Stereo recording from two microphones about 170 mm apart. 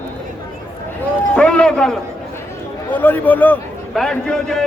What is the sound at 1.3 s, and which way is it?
A man's voice, 5° left (ahead or behind).